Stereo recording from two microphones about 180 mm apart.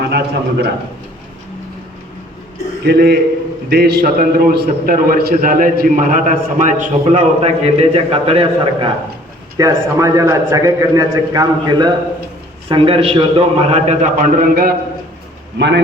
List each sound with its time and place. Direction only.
0.0 s a man's voice: 65° right (ahead or behind)
2.8 s a man's voice: 65° right (ahead or behind); by 8.9 s 35° right (ahead or behind)
9.6 s a man's voice: 20° right (ahead or behind); by 14.8 s 55° right (ahead or behind)
15.5 s a man's voice: 75° right (ahead or behind)